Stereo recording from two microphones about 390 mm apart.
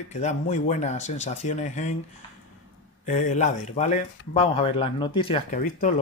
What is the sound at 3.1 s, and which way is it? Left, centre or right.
Speech, centre.